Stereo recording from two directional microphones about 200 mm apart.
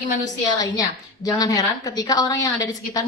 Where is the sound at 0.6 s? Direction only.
15° left (ahead or behind).